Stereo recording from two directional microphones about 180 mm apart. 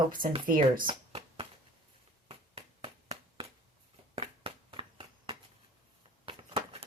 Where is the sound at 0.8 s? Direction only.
30° right (ahead or behind).